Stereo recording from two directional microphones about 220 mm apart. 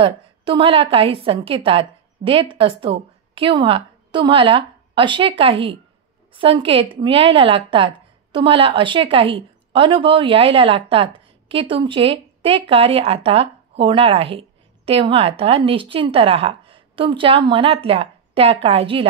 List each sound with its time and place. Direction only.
0.0 s a woman's voice: 25° right (ahead or behind)